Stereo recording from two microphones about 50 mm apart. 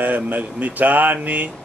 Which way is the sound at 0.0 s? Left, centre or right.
Right.